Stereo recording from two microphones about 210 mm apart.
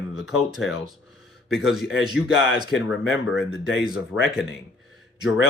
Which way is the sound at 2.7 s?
65° left (ahead or behind).